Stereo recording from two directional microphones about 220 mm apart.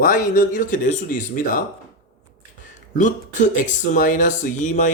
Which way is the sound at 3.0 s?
35° left (ahead or behind).